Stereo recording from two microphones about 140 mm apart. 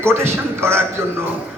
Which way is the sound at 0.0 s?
20° right (ahead or behind).